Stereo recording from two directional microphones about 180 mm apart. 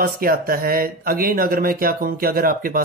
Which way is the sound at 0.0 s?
55° right (ahead or behind).